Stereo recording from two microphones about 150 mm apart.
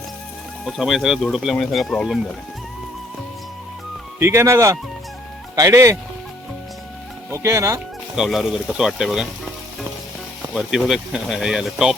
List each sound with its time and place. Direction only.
0.6 s speech: centre (ahead or behind)
4.2 s speech: 15° right (ahead or behind)
7.3 s speech: 20° right (ahead or behind)
8.1 s speech: centre (ahead or behind)
10.5 s speech: 5° right (ahead or behind)